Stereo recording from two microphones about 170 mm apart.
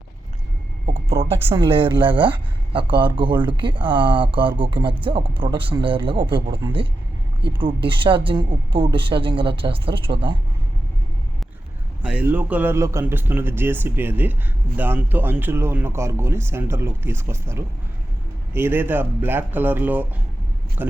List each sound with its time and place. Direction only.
1.3 s speech: 30° right (ahead or behind)
12.0 s speech: 10° right (ahead or behind)